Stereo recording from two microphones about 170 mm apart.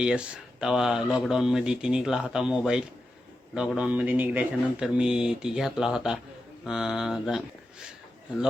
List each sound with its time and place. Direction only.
0.0 s speech: 5° right (ahead or behind)